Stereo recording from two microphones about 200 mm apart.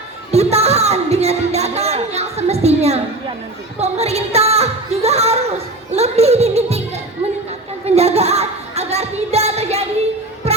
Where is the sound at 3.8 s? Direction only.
30° right (ahead or behind).